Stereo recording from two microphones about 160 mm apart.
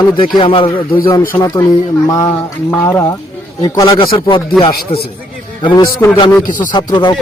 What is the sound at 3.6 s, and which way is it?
Speech, 20° left (ahead or behind).